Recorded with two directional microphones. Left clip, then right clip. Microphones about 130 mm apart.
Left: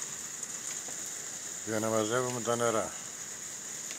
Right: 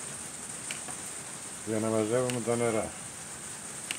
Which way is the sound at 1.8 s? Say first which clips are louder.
Right 2 dB; 50° left (ahead or behind).